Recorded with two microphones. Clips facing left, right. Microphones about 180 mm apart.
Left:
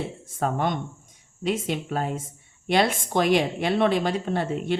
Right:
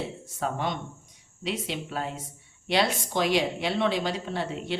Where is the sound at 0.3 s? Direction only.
50° left (ahead or behind).